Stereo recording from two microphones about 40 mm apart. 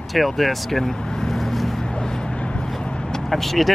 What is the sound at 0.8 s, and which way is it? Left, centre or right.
Speech, centre.